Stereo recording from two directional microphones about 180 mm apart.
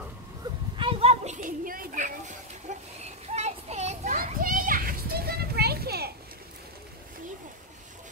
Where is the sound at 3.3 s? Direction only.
40° right (ahead or behind); by 6.1 s 60° right (ahead or behind).